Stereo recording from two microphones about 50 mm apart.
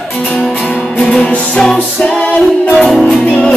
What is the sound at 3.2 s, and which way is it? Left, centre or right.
Music, left.